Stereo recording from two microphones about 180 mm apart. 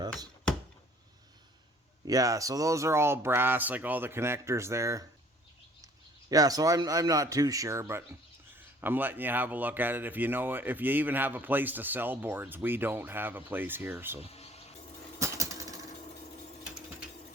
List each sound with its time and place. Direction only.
2.0 s speech: 20° right (ahead or behind)
6.3 s a man's voice: 20° right (ahead or behind)
14.2 s insect: 35° left (ahead or behind)
15.2 s a sound: 20° right (ahead or behind)